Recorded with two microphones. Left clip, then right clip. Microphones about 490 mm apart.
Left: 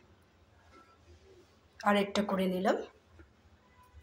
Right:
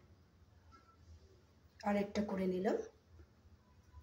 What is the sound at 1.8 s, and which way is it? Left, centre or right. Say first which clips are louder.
Speech: left 9 dB; right.